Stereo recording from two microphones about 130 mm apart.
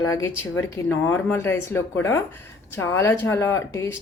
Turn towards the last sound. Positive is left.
turn(degrees=20)  # may be behind; listen again after turning